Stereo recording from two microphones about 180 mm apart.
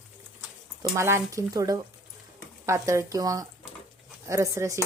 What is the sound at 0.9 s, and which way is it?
Speech, 15° right (ahead or behind).